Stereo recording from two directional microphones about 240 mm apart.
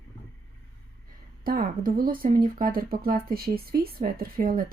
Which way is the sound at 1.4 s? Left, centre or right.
Right.